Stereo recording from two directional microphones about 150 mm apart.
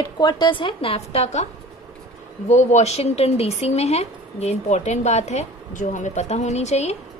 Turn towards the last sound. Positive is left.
turn(degrees=45)  # may be behind; listen again after turning